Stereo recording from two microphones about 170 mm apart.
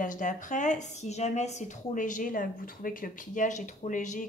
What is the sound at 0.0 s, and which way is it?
Speech, 50° left (ahead or behind).